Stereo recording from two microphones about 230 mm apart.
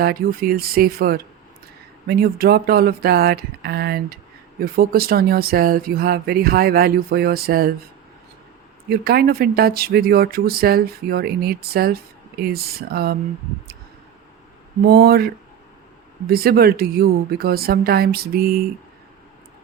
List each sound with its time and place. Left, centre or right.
0.0 s speech: right
8.9 s speech: right
14.8 s speech: right